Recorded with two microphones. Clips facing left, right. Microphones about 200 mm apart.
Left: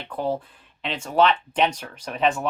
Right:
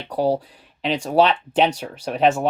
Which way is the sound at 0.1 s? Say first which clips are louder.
Right 6 dB; 40° right (ahead or behind).